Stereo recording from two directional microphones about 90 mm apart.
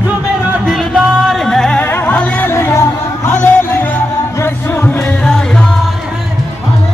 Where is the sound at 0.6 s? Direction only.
Centre (ahead or behind).